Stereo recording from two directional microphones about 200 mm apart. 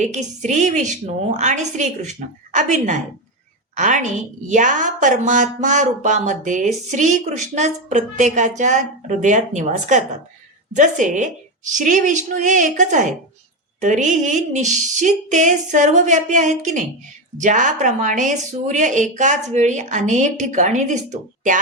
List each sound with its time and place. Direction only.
0.0 s a woman's voice: 35° right (ahead or behind)